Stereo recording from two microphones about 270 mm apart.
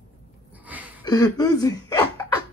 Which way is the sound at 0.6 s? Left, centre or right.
Centre.